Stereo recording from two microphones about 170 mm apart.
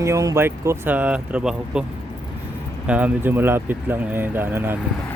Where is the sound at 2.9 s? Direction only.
10° right (ahead or behind).